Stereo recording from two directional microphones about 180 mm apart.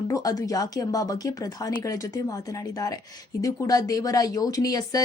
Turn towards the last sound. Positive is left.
turn(degrees=20)  # may be behind; listen again after turning